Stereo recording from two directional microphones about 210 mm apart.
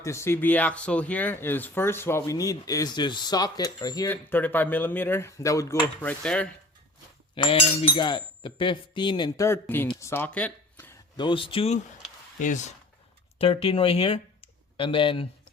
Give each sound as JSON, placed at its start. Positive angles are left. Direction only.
{"t": 0.0, "sound": "speech", "side_deg": 15}
{"t": 7.3, "sound": "speech", "side_deg": 20}
{"t": 11.2, "sound": "speech", "side_deg": 25}